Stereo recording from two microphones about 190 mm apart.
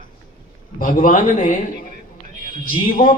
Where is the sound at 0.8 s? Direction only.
45° left (ahead or behind).